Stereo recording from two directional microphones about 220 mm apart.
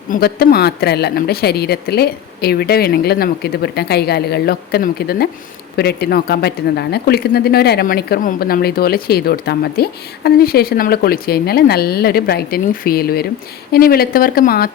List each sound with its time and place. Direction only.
0.1 s speech: 45° left (ahead or behind)